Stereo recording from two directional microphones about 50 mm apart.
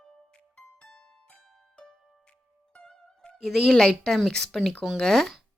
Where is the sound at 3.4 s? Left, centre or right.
Centre.